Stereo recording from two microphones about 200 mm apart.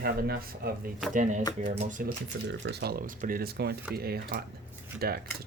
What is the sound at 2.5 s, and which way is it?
Speech, 55° right (ahead or behind).